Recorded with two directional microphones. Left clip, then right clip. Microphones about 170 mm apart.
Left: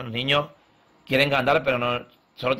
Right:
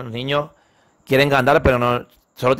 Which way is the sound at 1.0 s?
35° right (ahead or behind).